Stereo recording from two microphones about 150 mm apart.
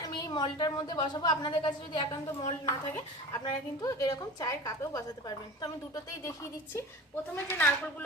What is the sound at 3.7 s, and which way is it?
A woman's voice, 25° left (ahead or behind).